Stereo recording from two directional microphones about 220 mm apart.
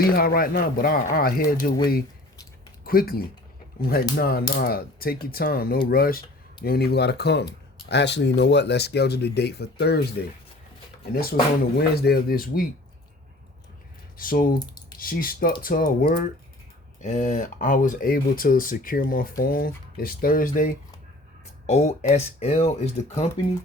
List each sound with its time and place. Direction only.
0.0 s speech: 45° left (ahead or behind)
2.8 s speech: 40° left (ahead or behind)
14.2 s speech: 40° left (ahead or behind)